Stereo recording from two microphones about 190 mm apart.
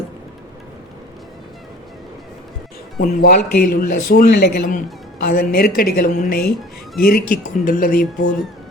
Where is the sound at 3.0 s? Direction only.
50° left (ahead or behind).